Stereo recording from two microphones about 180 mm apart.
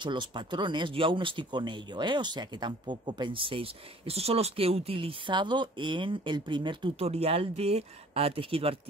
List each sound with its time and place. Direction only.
0.0 s speech: 25° right (ahead or behind)